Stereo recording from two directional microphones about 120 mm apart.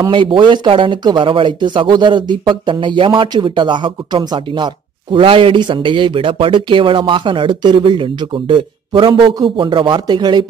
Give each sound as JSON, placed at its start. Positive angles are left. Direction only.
{"t": 0.1, "sound": "speech", "side_deg": -45}